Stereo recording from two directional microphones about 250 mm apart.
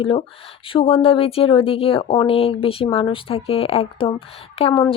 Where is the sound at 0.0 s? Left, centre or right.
Left.